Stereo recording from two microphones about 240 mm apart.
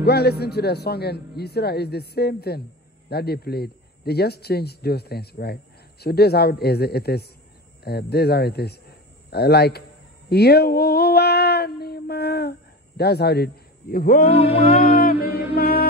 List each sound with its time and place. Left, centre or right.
0.0 s speech: left
10.3 s a sound: left
14.8 s speech: left
15.5 s music: left